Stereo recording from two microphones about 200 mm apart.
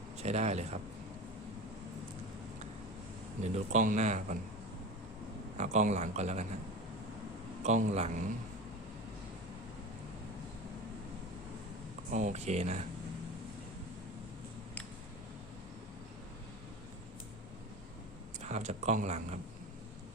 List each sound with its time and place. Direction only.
0.2 s speech: 35° right (ahead or behind)
3.4 s speech: 35° right (ahead or behind)
5.5 s speech: 35° right (ahead or behind)
7.6 s speech: 35° right (ahead or behind)
12.1 s speech: 35° right (ahead or behind)
18.4 s speech: 35° right (ahead or behind)